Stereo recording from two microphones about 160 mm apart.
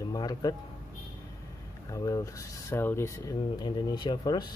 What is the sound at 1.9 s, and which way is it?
Speech, 20° left (ahead or behind).